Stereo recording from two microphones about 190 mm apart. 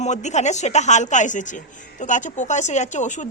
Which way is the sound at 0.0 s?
40° left (ahead or behind).